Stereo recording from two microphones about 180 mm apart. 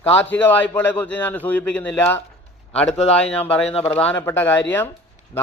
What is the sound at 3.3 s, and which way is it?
Speech, 10° left (ahead or behind).